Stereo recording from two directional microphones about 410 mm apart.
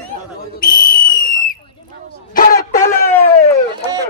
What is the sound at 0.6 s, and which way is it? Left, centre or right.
Whistle, centre.